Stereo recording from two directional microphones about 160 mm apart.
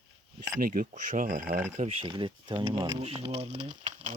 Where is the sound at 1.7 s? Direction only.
40° right (ahead or behind); by 3.0 s 25° right (ahead or behind).